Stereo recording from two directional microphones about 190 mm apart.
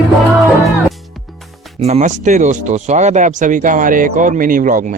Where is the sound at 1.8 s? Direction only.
35° right (ahead or behind).